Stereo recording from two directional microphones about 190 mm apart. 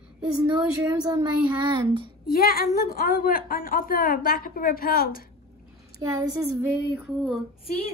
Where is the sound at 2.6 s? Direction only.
45° left (ahead or behind).